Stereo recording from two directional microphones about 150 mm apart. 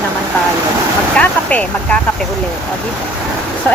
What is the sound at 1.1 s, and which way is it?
Speech, 10° left (ahead or behind).